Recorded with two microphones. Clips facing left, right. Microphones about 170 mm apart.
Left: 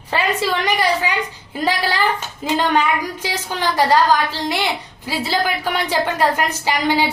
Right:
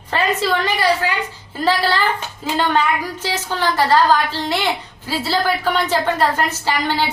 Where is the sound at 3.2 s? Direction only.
15° left (ahead or behind).